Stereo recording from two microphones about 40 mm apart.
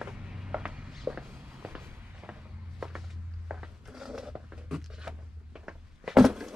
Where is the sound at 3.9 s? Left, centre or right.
Centre.